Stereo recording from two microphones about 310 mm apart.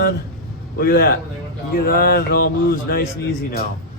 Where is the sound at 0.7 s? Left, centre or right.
Left.